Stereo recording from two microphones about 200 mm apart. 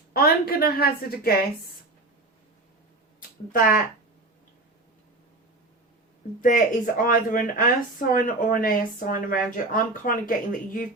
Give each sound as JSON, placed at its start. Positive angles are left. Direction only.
{"t": 0.1, "sound": "speech", "side_deg": 50}
{"t": 3.2, "sound": "a sound", "side_deg": 45}
{"t": 6.4, "sound": "speech", "side_deg": 45}